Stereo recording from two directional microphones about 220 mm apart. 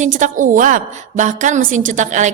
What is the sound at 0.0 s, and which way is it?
A woman's voice, 35° right (ahead or behind).